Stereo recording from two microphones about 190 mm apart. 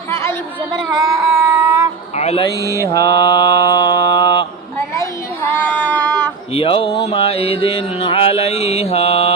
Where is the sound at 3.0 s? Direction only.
60° right (ahead or behind).